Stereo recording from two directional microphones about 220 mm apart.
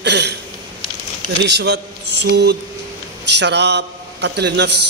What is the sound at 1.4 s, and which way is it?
A man's voice, 50° right (ahead or behind).